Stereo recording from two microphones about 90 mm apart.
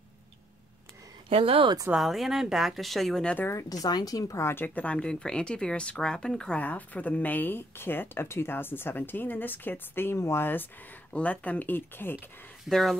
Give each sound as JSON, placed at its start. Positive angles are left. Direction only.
{"t": 1.4, "sound": "speech", "side_deg": -90}
{"t": 2.0, "sound": "speech", "side_deg": 0}
{"t": 3.4, "sound": "speech", "side_deg": 40}
{"t": 4.4, "sound": "speech", "side_deg": 25}
{"t": 6.6, "sound": "speech", "side_deg": 20}
{"t": 12.6, "sound": "speech", "side_deg": 0}